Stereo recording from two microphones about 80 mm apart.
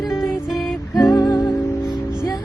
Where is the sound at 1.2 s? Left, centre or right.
Left.